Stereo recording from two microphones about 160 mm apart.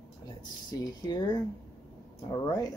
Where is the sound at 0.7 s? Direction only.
20° left (ahead or behind).